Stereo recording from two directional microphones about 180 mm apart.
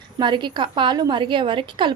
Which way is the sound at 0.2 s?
25° right (ahead or behind).